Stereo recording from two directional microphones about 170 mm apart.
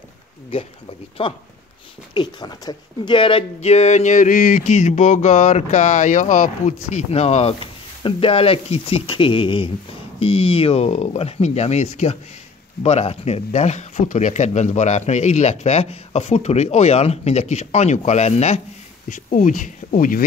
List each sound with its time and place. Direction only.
0.5 s speech: 30° left (ahead or behind); by 20.2 s 55° left (ahead or behind)